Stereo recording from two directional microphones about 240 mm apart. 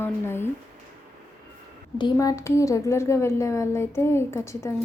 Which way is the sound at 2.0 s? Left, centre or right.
Centre.